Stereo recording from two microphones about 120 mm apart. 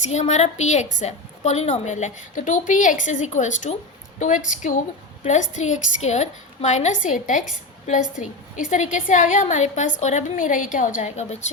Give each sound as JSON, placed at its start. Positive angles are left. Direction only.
{"t": 0.1, "sound": "a woman's voice", "side_deg": 70}